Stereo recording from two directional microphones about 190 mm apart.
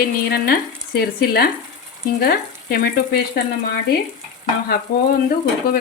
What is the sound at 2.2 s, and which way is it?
Frying, 50° left (ahead or behind).